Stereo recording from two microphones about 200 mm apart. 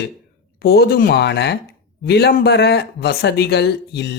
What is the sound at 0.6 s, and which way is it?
Speech, 55° left (ahead or behind).